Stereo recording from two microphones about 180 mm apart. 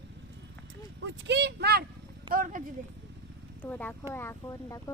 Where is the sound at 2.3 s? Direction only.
50° right (ahead or behind).